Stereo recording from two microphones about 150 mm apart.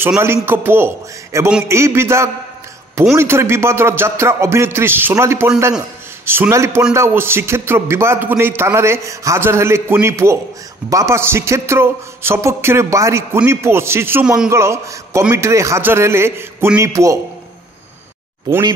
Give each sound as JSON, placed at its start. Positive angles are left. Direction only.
{"t": 0.2, "sound": "a man's voice", "side_deg": -15}